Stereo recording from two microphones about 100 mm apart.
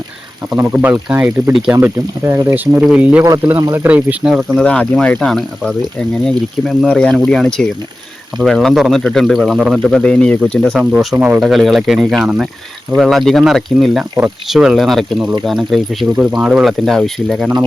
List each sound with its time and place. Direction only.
0.6 s speech: 20° right (ahead or behind)
2.8 s speech: 10° right (ahead or behind)
4.6 s speech: 15° left (ahead or behind)
5.2 s speech: centre (ahead or behind)
10.8 s speech: 5° right (ahead or behind)